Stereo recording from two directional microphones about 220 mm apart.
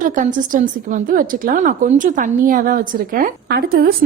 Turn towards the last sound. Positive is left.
turn(degrees=-45)  # may be behind; listen again after turning